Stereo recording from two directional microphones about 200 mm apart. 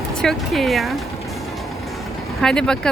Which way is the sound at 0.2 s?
Centre (ahead or behind).